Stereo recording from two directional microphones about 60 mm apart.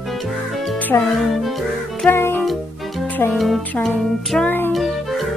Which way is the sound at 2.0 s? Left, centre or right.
Left.